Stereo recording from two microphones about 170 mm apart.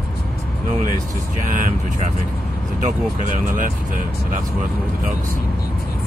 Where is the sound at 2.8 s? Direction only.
50° right (ahead or behind).